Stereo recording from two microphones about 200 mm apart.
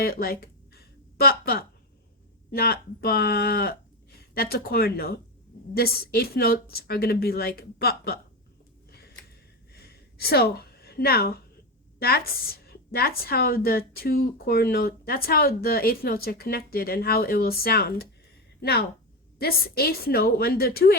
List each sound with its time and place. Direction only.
0.0 s a woman's voice: 50° left (ahead or behind)
9.7 s a sound: 50° left (ahead or behind)
11.9 s a woman's voice: 50° left (ahead or behind)